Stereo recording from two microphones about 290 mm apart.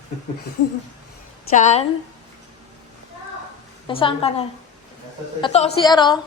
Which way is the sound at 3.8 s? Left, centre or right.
Centre.